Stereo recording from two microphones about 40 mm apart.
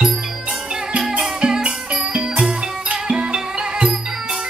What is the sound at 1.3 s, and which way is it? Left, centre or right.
Music, right.